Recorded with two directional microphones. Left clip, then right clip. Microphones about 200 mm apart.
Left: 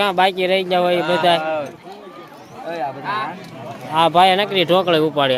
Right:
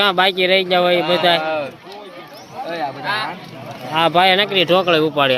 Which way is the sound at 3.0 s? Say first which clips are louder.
Right 2 dB; 40° right (ahead or behind).